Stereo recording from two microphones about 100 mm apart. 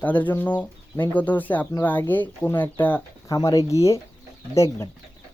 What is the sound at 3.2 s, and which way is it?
Speech, 35° left (ahead or behind).